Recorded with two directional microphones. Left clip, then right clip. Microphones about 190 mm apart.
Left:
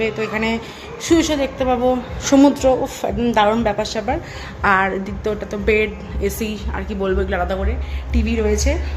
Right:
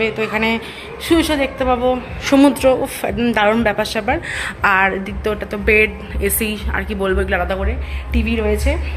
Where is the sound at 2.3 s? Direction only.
10° left (ahead or behind).